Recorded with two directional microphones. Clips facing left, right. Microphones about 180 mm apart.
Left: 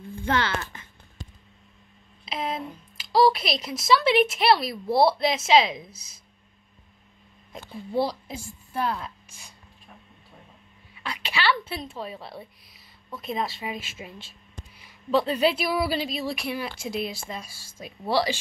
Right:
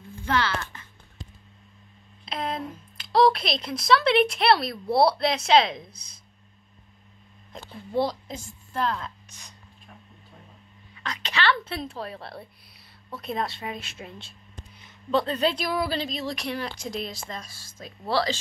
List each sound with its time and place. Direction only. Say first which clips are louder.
0.2 s speech: even; 25° left (ahead or behind)
2.2 s a woman's voice: even; 5° left (ahead or behind)
7.7 s speech: even; 10° left (ahead or behind)
11.0 s a woman's voice: right 1 dB; 10° left (ahead or behind)